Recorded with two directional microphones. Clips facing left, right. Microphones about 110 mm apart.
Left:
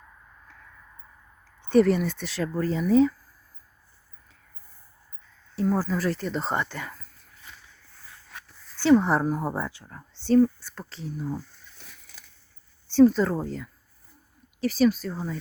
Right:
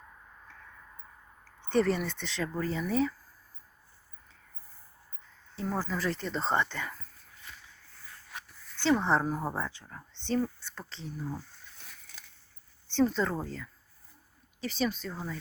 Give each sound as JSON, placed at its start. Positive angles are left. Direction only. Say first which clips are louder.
{"t": 1.6, "sound": "a sound", "louder": "left 8 dB", "side_deg": 15}
{"t": 2.0, "sound": "speech", "louder": "left 6 dB", "side_deg": 5}
{"t": 5.6, "sound": "speech", "louder": "left 7 dB", "side_deg": 10}
{"t": 8.8, "sound": "speech", "louder": "left 7 dB", "side_deg": 10}
{"t": 12.9, "sound": "speech", "louder": "left 9 dB", "side_deg": 10}